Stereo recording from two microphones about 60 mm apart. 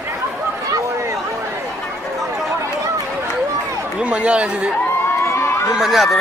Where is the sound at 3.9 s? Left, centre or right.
Right.